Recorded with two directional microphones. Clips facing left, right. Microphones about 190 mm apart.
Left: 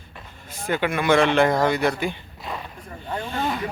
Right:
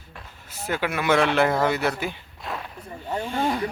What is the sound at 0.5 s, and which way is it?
Speech, 5° right (ahead or behind).